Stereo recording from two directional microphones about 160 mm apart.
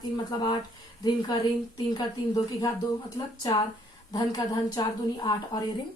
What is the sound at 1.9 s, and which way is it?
A woman's voice, 25° left (ahead or behind).